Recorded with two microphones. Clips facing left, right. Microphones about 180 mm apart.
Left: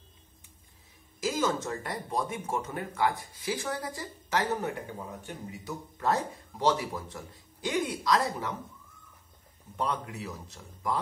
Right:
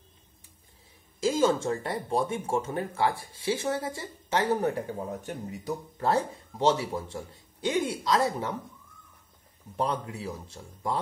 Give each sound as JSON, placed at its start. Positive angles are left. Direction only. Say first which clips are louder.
{"t": 1.2, "sound": "speech", "louder": "right 5 dB", "side_deg": -30}
{"t": 9.8, "sound": "speech", "louder": "right 3 dB", "side_deg": -30}